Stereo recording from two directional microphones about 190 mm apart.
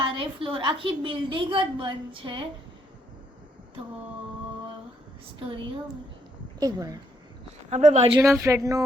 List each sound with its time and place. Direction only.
0.0 s a woman's voice: 25° right (ahead or behind)
6.6 s a woman's voice: 20° right (ahead or behind)
7.7 s speech: 40° right (ahead or behind)
8.2 s speech: 15° right (ahead or behind)